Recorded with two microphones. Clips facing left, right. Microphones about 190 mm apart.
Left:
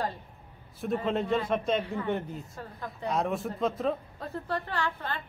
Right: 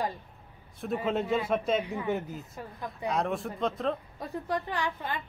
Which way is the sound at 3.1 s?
Centre (ahead or behind).